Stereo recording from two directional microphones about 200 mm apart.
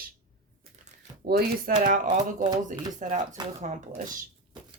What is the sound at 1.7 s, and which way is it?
Speech, 40° right (ahead or behind).